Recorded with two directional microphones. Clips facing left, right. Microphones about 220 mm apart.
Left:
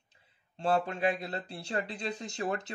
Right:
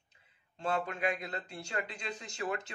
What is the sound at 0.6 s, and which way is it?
Speech, 30° left (ahead or behind).